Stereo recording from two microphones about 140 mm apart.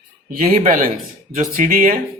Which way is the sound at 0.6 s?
80° right.